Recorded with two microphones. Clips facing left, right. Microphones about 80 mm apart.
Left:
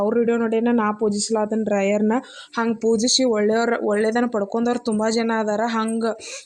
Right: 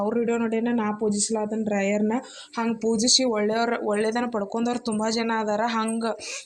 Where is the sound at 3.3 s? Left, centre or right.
Left.